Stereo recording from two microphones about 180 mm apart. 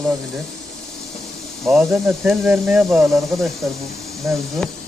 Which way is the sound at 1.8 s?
Centre (ahead or behind).